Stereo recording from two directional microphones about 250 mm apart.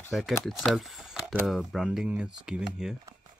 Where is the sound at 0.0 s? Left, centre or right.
Centre.